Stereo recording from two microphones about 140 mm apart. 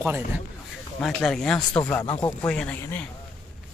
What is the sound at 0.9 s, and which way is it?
A man's voice, 5° left (ahead or behind).